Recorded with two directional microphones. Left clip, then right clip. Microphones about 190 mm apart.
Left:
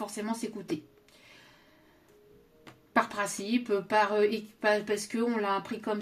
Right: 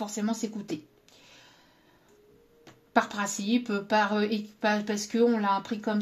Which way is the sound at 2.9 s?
35° right (ahead or behind).